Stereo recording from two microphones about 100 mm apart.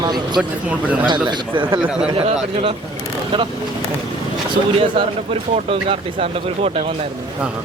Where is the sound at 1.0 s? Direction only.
50° right (ahead or behind).